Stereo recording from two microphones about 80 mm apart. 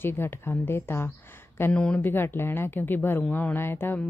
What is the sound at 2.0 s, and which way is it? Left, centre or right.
A woman's voice, left.